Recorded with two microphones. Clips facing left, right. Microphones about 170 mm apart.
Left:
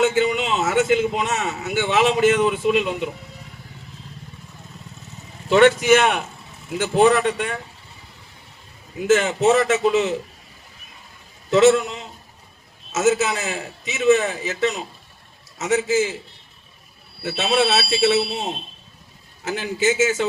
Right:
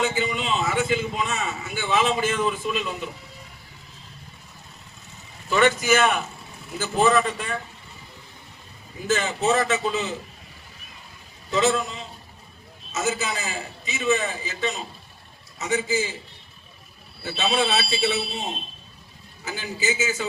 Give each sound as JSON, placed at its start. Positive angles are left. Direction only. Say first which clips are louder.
{"t": 0.0, "sound": "a man's voice", "louder": "left 6 dB", "side_deg": 70}
{"t": 5.5, "sound": "a man's voice", "louder": "left 6 dB", "side_deg": 70}
{"t": 9.0, "sound": "a man's voice", "louder": "left 7 dB", "side_deg": 80}
{"t": 11.5, "sound": "a man's voice", "louder": "left 8 dB", "side_deg": 75}
{"t": 17.2, "sound": "speech", "louder": "left 4 dB", "side_deg": 80}
{"t": 19.5, "sound": "speech", "louder": "left 7 dB", "side_deg": 85}